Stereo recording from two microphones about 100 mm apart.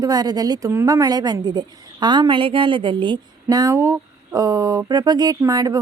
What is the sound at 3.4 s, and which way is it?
A woman's voice, 40° right (ahead or behind).